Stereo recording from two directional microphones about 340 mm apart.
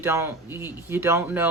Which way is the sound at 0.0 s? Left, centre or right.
Centre.